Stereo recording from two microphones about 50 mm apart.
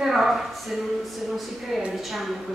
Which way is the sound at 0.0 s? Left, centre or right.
Centre.